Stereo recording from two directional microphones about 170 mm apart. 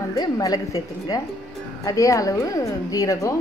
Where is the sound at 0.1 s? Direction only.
20° left (ahead or behind).